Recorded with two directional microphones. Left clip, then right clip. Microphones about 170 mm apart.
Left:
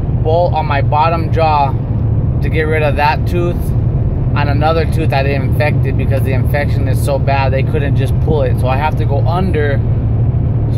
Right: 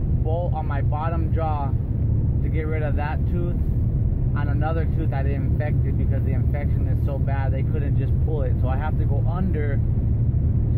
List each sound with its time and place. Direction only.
0.3 s speech: 15° left (ahead or behind)
7.1 s speech: 20° left (ahead or behind)